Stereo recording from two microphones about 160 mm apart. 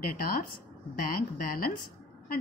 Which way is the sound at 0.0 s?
60° left (ahead or behind).